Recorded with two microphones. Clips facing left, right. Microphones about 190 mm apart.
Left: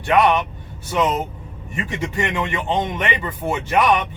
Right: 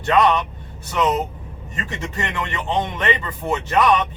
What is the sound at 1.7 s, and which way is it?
Speech, 10° left (ahead or behind).